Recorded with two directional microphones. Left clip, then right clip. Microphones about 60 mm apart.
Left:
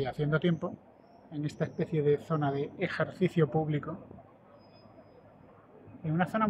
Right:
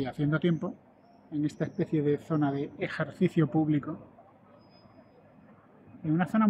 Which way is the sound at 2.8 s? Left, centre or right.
Centre.